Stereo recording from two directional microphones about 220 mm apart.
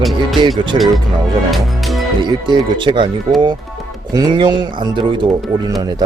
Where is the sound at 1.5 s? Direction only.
Centre (ahead or behind).